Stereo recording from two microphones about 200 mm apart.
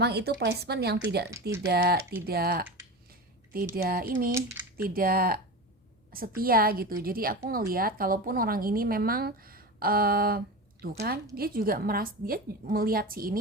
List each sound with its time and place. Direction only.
0.0 s speech: 55° right (ahead or behind)
1.3 s speech: 15° right (ahead or behind)
1.6 s a woman's voice: 50° right (ahead or behind)
3.1 s a sound: 45° right (ahead or behind)
3.8 s a woman's voice: 50° right (ahead or behind)